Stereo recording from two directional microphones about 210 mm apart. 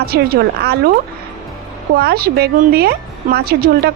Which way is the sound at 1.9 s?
50° right (ahead or behind).